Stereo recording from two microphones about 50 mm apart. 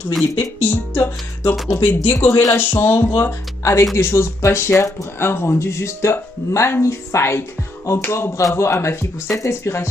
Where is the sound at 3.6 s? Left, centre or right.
Left.